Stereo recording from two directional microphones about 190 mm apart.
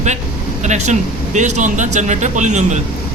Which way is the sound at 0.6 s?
40° right (ahead or behind).